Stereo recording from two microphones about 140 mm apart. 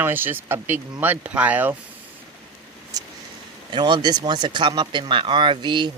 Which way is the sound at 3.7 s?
35° right (ahead or behind).